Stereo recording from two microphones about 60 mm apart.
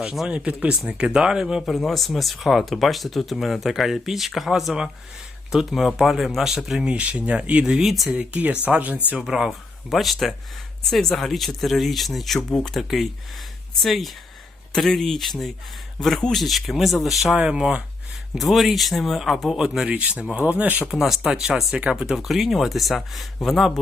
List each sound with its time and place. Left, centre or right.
0.0 s speech: centre
1.6 s speech: centre
6.8 s speech: right
7.9 s speech: centre
8.2 s speech: right
9.1 s speech: centre
13.8 s speech: centre
17.3 s speech: centre
18.3 s speech: centre
19.5 s speech: centre
20.8 s speech: centre
21.8 s speech: centre